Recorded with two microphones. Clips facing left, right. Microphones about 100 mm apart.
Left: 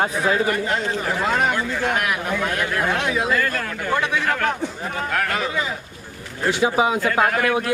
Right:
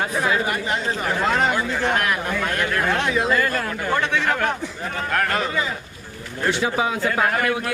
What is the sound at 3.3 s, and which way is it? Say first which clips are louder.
Speech: right 1 dB; 5° right (ahead or behind).